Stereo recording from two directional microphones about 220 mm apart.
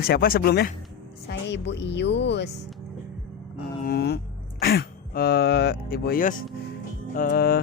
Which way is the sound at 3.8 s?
45° left (ahead or behind).